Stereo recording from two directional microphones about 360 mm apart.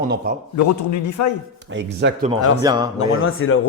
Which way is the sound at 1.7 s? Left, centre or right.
Right.